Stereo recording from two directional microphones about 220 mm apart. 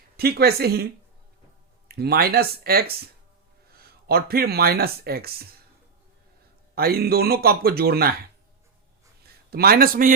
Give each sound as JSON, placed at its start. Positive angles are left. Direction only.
{"t": 0.2, "sound": "speech", "side_deg": -45}
{"t": 1.9, "sound": "speech", "side_deg": -45}
{"t": 6.7, "sound": "speech", "side_deg": -45}
{"t": 9.5, "sound": "a man's voice", "side_deg": -45}